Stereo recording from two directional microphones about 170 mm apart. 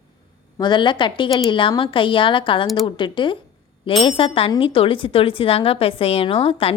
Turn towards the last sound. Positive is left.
turn(degrees=35)  # may be behind; listen again after turning